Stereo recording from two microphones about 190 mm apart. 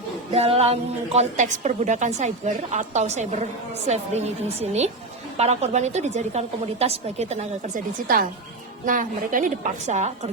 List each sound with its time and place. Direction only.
0.3 s a woman's voice: 30° right (ahead or behind)
8.0 s a woman's voice: 50° right (ahead or behind)